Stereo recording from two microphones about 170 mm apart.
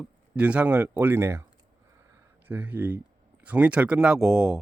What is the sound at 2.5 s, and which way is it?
A man's voice, 10° right (ahead or behind).